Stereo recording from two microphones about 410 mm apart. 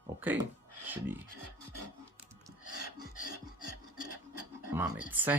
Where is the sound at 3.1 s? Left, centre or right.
Left.